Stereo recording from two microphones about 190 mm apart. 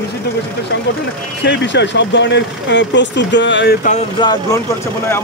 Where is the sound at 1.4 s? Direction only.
65° left (ahead or behind).